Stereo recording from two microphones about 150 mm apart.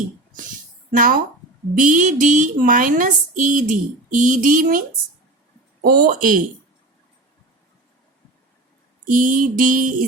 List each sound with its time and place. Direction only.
0.9 s speech: 65° right (ahead or behind)
5.8 s mantra: 75° right (ahead or behind)
9.0 s mantra: 65° right (ahead or behind)